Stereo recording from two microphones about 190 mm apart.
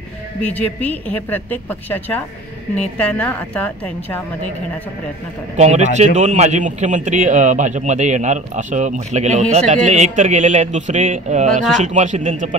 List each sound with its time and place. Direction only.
0.4 s a woman's voice: 10° left (ahead or behind)
5.6 s a man's voice: 35° right (ahead or behind)